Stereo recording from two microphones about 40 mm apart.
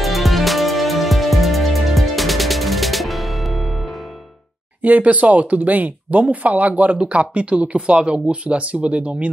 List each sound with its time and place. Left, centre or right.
0.0 s music: centre
4.8 s speech: right